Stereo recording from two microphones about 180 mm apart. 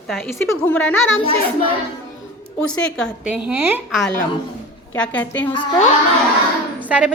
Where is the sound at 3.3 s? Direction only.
10° right (ahead or behind).